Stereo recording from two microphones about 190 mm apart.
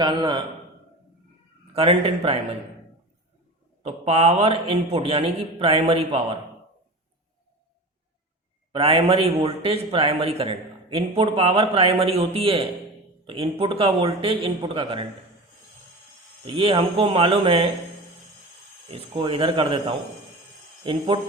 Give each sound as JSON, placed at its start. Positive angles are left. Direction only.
{"t": 0.0, "sound": "speech", "side_deg": -25}
{"t": 1.7, "sound": "a man's voice", "side_deg": -30}
{"t": 3.8, "sound": "a man's voice", "side_deg": -35}
{"t": 8.7, "sound": "a man's voice", "side_deg": -30}
{"t": 16.5, "sound": "speech", "side_deg": -30}
{"t": 18.9, "sound": "speech", "side_deg": -30}